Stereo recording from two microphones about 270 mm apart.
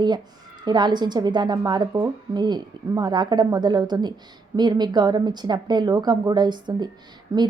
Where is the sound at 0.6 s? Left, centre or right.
Centre.